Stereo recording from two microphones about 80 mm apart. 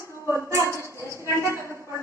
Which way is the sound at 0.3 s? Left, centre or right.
Right.